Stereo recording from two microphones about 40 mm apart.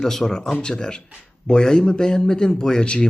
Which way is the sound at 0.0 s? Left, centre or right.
Centre.